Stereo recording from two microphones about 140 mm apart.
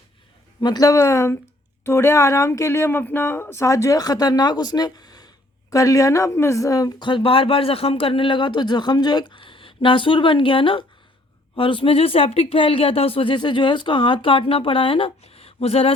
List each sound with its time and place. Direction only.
0.6 s speech: 30° left (ahead or behind); by 15.9 s 45° left (ahead or behind)